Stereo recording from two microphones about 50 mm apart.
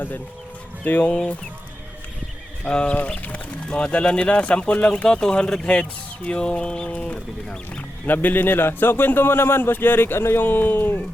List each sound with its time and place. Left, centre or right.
0.9 s speech: left
2.6 s speech: centre
5.0 s speech: centre
8.0 s a man's voice: left